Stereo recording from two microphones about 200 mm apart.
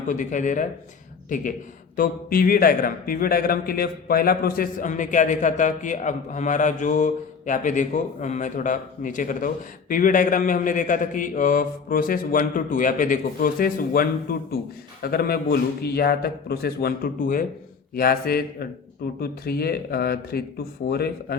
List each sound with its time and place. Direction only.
0.1 s a man's voice: 40° left (ahead or behind)